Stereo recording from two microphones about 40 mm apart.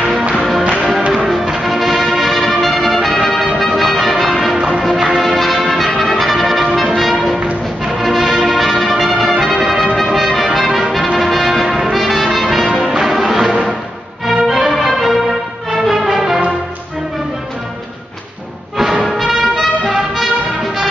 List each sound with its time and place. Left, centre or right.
0.5 s music: centre
4.6 s music: right
4.9 s music: centre
5.2 s brass instrument: centre
6.7 s music: centre
9.9 s brass instrument: centre
11.1 s music: centre
18.8 s music: centre